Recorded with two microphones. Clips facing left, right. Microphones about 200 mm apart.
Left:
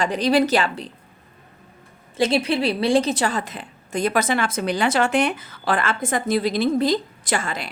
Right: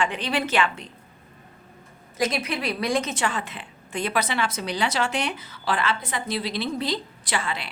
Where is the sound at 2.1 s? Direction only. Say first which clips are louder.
Left 6 dB; 30° left (ahead or behind).